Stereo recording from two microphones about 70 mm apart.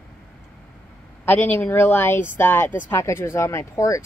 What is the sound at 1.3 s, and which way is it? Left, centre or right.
Speech, left.